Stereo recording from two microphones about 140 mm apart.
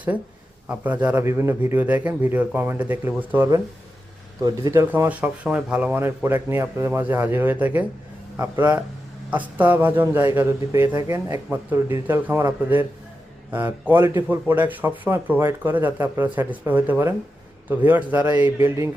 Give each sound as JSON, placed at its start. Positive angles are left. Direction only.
{"t": 0.7, "sound": "speech", "side_deg": -10}